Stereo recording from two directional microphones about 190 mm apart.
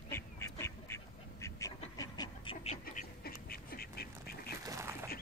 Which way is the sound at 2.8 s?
50° left (ahead or behind).